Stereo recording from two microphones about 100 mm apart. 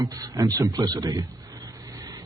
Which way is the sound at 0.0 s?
35° right (ahead or behind).